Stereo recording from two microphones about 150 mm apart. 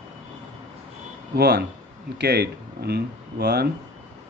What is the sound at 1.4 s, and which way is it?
Speech, 90° right.